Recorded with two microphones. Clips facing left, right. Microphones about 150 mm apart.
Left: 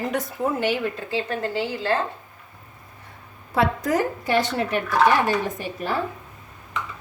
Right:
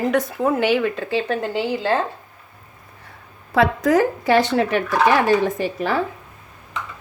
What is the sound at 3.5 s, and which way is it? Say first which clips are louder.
Speech: right 5 dB; 90° right.